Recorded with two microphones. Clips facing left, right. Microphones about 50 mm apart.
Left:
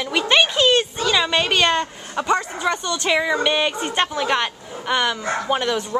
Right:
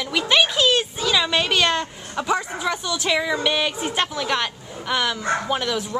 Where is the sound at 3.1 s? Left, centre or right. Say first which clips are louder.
Left 3 dB; centre.